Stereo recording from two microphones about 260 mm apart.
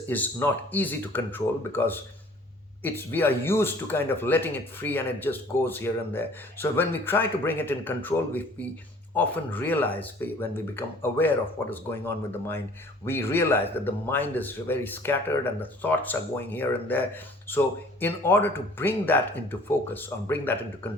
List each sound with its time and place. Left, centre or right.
0.1 s speech: centre
18.0 s speech: centre